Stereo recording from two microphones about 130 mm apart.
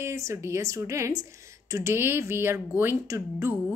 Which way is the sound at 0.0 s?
20° right (ahead or behind).